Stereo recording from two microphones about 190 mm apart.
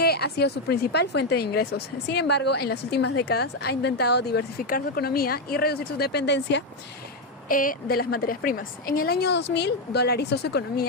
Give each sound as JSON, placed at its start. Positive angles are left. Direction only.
{"t": 0.0, "sound": "a woman's voice", "side_deg": 55}
{"t": 7.4, "sound": "a woman's voice", "side_deg": 45}